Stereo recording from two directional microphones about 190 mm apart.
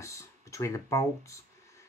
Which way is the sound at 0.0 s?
15° left (ahead or behind).